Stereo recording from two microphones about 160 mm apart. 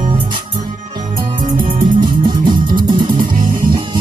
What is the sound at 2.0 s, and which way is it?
Music, 30° right (ahead or behind).